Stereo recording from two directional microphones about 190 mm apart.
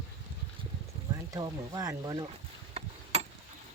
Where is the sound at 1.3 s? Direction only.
20° right (ahead or behind).